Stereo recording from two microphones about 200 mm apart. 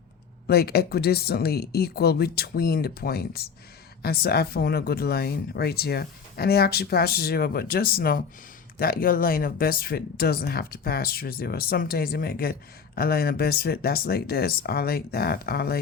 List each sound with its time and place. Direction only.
0.4 s speech: 50° left (ahead or behind)